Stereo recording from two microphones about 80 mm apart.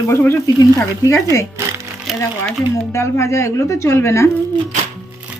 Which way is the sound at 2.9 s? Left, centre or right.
Left.